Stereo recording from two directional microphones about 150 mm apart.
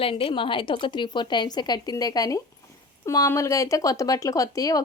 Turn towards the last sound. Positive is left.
turn(degrees=25)  # may be behind; listen again after turning